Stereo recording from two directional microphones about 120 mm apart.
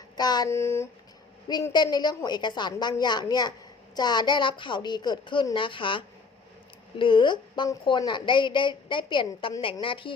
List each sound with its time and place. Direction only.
0.2 s a woman's voice: 35° left (ahead or behind)
0.5 s speech: 20° left (ahead or behind)
1.7 s a woman's voice: 35° left (ahead or behind)